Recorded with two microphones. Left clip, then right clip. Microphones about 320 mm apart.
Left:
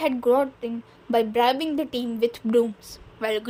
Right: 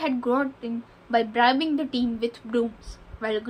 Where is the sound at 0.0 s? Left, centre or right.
Left.